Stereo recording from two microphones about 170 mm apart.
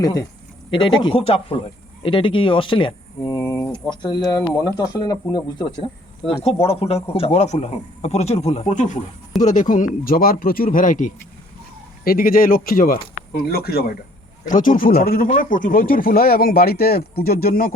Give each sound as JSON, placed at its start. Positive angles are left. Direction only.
{"t": 0.0, "sound": "a man's voice", "side_deg": 20}